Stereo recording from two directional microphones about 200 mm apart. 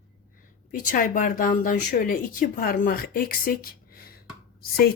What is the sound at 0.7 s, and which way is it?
Speech, 45° left (ahead or behind).